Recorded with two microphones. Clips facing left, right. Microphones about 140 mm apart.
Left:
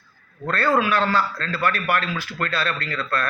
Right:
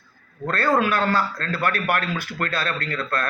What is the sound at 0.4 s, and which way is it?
A man's voice, 45° right (ahead or behind).